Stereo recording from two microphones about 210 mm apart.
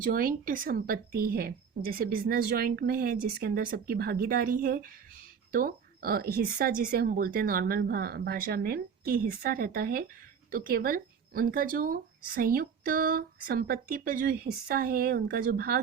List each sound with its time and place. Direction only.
0.0 s speech: 40° right (ahead or behind)